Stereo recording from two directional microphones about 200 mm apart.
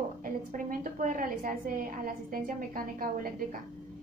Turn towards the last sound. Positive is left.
turn(degrees=-45)  # may be behind; listen again after turning